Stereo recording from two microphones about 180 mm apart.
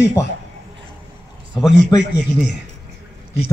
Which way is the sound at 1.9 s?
25° left (ahead or behind).